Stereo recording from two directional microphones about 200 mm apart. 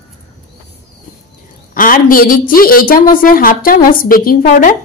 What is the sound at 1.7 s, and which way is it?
A woman's voice, 45° left (ahead or behind).